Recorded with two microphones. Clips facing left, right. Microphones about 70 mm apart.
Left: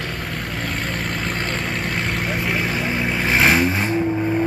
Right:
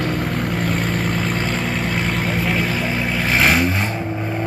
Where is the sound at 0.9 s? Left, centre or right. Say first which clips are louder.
Right 4 dB; centre.